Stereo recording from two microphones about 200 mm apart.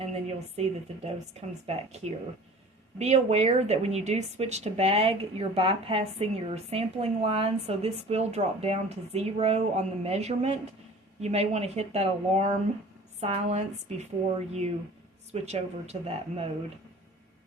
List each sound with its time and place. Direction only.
0.0 s speech: 35° right (ahead or behind)
15.3 s speech: 30° right (ahead or behind)